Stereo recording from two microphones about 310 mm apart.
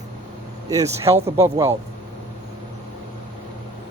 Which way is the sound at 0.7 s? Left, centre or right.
Centre.